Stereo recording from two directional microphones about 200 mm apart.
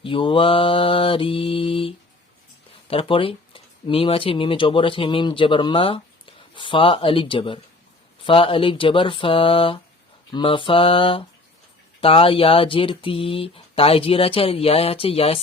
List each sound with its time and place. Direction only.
0.0 s speech: 25° left (ahead or behind)